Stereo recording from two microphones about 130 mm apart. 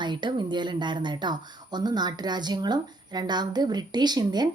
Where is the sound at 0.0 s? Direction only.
35° right (ahead or behind).